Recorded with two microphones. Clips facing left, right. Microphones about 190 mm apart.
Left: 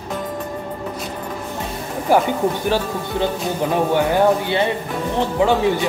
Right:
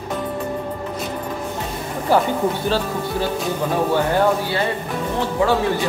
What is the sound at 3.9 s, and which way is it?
Speech, 20° left (ahead or behind).